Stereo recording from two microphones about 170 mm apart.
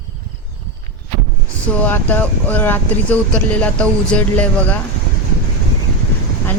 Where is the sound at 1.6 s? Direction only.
10° left (ahead or behind).